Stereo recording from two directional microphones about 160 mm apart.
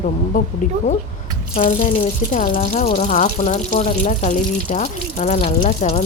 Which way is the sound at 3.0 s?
50° left (ahead or behind).